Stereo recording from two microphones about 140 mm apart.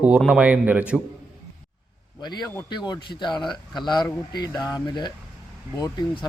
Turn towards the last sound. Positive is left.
turn(degrees=30)  # may be behind; listen again after turning